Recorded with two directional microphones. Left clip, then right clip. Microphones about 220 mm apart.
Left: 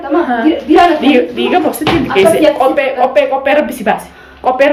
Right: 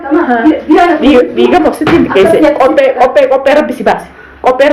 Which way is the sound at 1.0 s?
15° left (ahead or behind).